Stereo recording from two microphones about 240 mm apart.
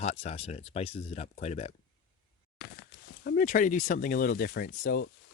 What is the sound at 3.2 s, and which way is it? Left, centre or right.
Speech, left.